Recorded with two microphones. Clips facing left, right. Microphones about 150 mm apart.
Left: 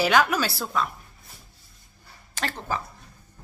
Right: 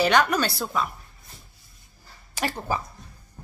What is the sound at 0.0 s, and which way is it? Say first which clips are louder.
Speech: right 1 dB; 5° left (ahead or behind).